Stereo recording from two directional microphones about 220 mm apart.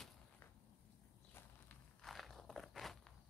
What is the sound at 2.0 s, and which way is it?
Walk, centre (ahead or behind).